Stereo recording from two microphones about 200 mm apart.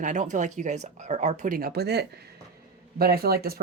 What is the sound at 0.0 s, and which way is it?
Speech, 40° right (ahead or behind).